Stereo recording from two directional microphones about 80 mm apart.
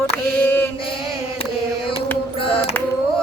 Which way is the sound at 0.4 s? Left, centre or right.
Left.